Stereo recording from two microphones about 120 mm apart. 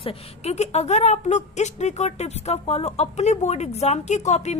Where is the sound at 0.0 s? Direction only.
55° left (ahead or behind).